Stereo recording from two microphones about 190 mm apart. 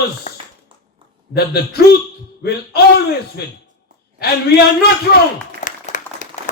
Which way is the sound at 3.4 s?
55° left (ahead or behind).